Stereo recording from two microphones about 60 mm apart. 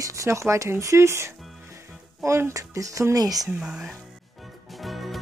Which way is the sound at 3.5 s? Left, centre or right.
Centre.